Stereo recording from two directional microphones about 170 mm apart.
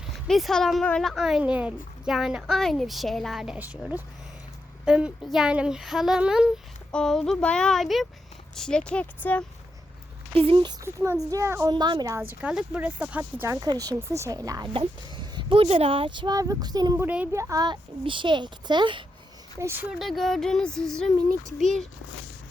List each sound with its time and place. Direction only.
0.0 s speech: centre (ahead or behind)
4.9 s speech: 5° right (ahead or behind)
10.3 s speech: 30° right (ahead or behind)
19.5 s speech: 15° right (ahead or behind)
20.0 s speech: centre (ahead or behind)